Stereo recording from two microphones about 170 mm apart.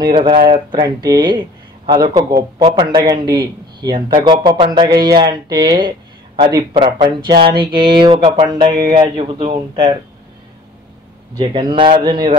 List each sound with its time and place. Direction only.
0.0 s speech: 25° right (ahead or behind)
11.3 s speech: 30° right (ahead or behind)